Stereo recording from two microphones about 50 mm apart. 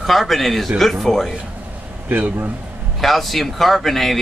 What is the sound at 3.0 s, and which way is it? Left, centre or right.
Speech, centre.